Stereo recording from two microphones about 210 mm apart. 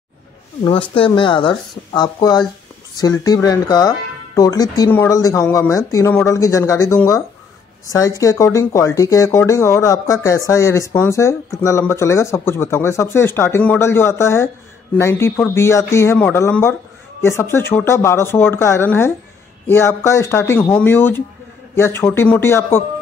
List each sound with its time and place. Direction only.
0.7 s speech: 25° left (ahead or behind)